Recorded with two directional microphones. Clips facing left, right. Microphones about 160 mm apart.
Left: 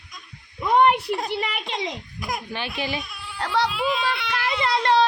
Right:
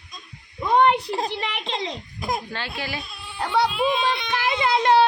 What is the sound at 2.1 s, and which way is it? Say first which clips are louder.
Speech: right 5 dB; 25° right (ahead or behind).